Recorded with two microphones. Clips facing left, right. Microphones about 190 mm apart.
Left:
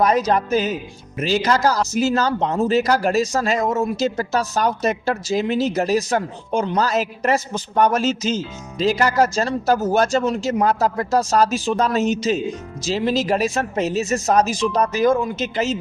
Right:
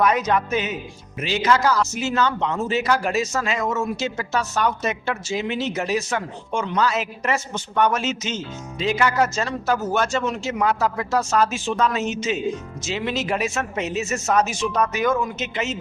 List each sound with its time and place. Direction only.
0.0 s a man's voice: 35° left (ahead or behind)